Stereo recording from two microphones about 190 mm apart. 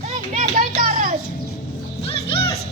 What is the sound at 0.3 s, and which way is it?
Music, 45° right (ahead or behind).